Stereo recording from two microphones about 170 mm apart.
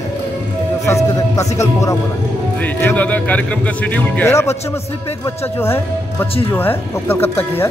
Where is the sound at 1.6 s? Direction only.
15° left (ahead or behind).